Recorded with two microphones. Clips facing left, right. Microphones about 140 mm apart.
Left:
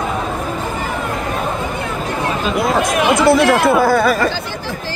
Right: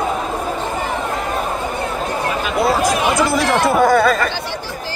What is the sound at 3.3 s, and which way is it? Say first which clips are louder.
Speech: left 3 dB; 5° left (ahead or behind).